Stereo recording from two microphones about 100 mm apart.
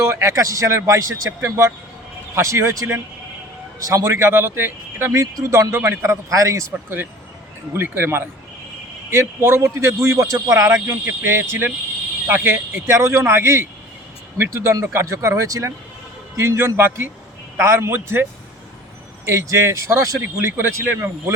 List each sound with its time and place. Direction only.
0.0 s speech: 25° right (ahead or behind)
20.3 s speech: 20° right (ahead or behind)